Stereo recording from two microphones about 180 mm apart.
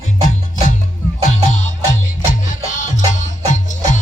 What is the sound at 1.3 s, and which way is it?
Music, 40° left (ahead or behind).